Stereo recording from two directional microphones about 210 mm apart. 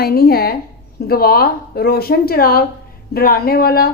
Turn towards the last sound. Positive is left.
turn(degrees=45)  # may be behind; listen again after turning